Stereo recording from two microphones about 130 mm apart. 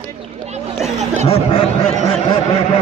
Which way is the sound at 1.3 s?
50° left (ahead or behind).